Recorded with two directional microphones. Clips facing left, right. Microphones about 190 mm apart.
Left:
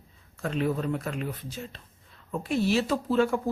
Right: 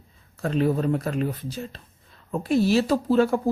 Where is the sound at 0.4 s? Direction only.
35° right (ahead or behind).